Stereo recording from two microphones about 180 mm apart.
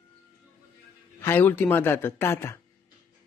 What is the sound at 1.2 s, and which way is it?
Speech, 10° left (ahead or behind).